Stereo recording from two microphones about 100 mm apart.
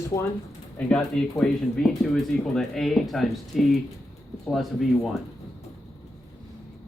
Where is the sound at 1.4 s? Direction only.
5° left (ahead or behind).